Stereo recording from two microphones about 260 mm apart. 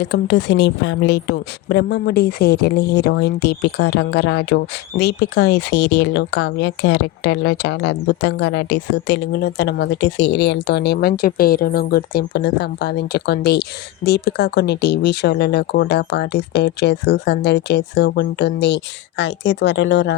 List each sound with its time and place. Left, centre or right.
0.0 s a woman's voice: left